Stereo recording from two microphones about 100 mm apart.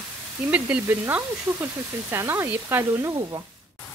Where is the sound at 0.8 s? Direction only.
20° right (ahead or behind).